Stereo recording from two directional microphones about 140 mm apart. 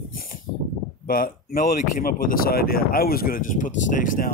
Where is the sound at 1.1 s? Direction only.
90° left; by 4.3 s 75° left (ahead or behind).